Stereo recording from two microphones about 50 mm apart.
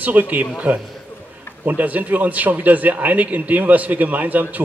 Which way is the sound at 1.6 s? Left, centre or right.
Right.